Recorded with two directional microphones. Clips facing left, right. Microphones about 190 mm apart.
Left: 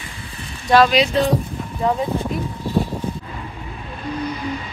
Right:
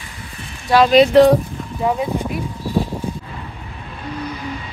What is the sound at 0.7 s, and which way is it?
Speech, 5° right (ahead or behind).